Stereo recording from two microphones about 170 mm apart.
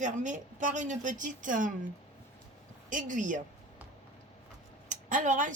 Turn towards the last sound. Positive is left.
turn(degrees=-50)  # may be behind; listen again after turning